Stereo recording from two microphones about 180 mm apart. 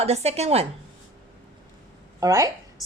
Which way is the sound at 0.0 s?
35° right (ahead or behind).